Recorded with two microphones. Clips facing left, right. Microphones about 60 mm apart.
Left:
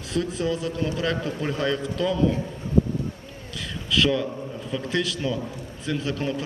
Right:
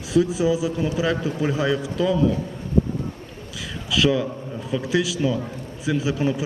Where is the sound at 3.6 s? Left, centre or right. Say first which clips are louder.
Right 1 dB; centre.